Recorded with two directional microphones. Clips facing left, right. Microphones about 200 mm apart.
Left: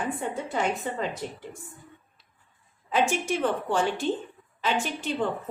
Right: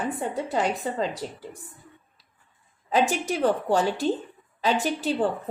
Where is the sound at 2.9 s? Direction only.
40° right (ahead or behind).